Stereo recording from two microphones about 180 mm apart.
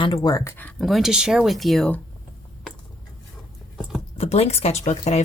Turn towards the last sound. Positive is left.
turn(degrees=40)  # may be behind; listen again after turning